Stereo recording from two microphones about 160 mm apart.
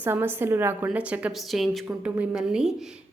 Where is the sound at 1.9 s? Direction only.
10° right (ahead or behind).